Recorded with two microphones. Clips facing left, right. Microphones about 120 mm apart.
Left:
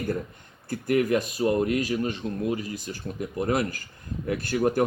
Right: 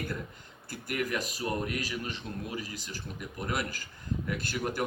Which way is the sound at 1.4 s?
35° left (ahead or behind).